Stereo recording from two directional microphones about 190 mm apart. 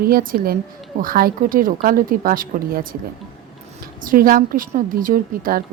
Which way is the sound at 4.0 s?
45° right (ahead or behind).